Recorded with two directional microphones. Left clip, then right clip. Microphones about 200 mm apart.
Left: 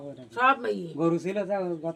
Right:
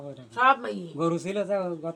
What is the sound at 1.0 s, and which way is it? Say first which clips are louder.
Speech: right 1 dB; 20° right (ahead or behind).